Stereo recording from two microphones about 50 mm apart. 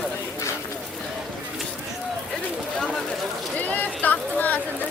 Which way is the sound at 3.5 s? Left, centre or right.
Left.